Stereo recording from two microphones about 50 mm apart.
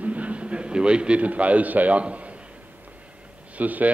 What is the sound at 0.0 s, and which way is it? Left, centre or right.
A man's voice, right.